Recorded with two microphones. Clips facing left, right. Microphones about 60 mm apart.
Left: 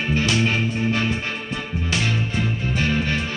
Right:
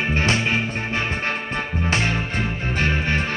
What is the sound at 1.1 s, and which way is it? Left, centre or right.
Music, right.